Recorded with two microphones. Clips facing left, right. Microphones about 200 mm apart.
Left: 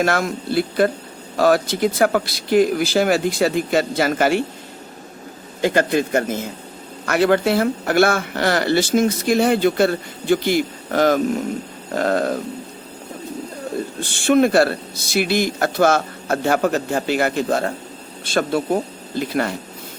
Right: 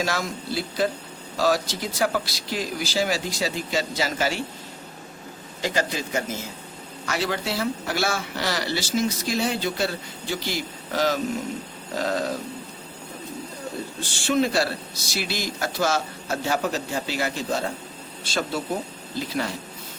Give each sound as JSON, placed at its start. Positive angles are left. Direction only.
{"t": 0.0, "sound": "speech", "side_deg": 55}
{"t": 5.6, "sound": "speech", "side_deg": 55}
{"t": 14.0, "sound": "speech", "side_deg": 55}